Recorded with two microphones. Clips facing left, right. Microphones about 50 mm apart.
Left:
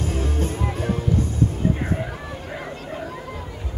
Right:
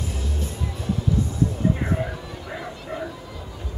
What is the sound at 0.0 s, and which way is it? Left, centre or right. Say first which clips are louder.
Music: left 6 dB; left.